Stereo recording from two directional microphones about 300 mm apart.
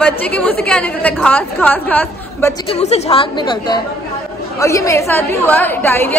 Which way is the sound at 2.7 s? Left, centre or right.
Centre.